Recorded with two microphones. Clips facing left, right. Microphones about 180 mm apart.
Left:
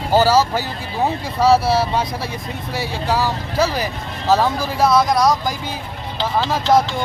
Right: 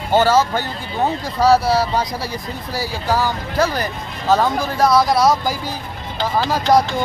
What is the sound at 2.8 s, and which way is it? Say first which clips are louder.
Speech: even; centre (ahead or behind).